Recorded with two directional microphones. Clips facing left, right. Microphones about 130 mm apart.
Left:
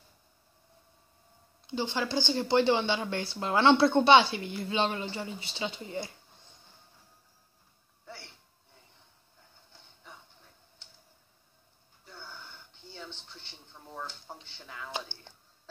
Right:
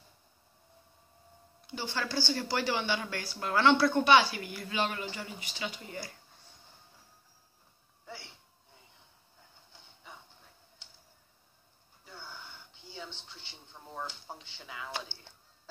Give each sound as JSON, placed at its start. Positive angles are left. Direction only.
{"t": 1.7, "sound": "speech", "side_deg": 20}
{"t": 12.0, "sound": "gasp", "side_deg": -10}
{"t": 12.8, "sound": "television", "side_deg": -10}
{"t": 13.9, "sound": "a sound", "side_deg": -10}